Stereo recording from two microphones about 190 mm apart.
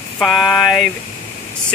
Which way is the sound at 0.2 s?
Centre (ahead or behind).